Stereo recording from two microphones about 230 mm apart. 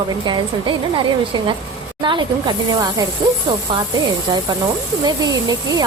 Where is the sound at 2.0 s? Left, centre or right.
Centre.